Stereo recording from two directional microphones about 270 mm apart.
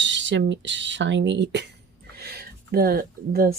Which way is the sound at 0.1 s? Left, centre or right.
Right.